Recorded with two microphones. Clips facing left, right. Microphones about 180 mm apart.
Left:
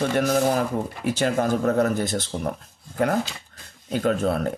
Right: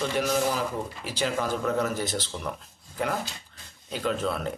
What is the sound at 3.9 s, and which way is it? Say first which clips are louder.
Speech: left 6 dB; 50° left (ahead or behind).